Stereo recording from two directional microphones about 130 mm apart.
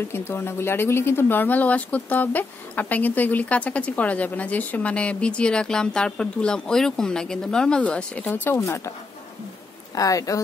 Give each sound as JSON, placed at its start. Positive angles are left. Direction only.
{"t": 0.1, "sound": "speech", "side_deg": 20}
{"t": 8.5, "sound": "speech", "side_deg": 25}
{"t": 9.9, "sound": "speech", "side_deg": 25}